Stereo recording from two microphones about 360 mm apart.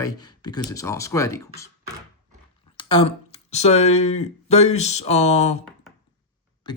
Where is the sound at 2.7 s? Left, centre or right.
Centre.